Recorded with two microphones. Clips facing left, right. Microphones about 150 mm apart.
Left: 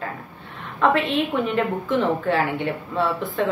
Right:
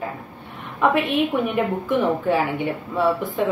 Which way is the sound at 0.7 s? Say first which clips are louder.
Right 1 dB; 15° right (ahead or behind).